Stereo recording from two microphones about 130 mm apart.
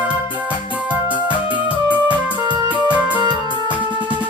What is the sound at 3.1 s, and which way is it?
Music, 35° right (ahead or behind).